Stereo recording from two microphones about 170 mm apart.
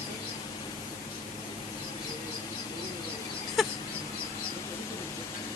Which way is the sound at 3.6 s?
Centre (ahead or behind).